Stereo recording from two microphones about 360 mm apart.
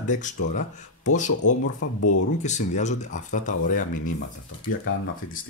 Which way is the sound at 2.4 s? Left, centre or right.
Centre.